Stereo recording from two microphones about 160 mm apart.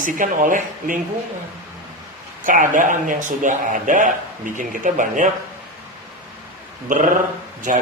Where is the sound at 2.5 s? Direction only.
55° right (ahead or behind).